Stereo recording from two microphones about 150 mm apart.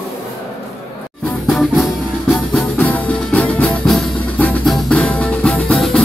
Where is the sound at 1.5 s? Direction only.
Centre (ahead or behind).